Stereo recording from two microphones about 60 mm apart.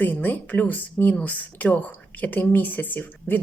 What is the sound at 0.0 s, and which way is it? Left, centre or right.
A woman's voice, left.